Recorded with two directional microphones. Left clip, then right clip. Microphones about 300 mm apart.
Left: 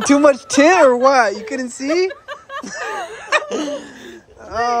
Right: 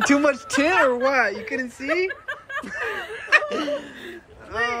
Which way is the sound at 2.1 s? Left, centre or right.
Left.